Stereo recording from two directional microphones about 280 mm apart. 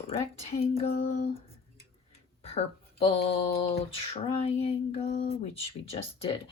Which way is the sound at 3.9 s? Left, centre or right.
Left.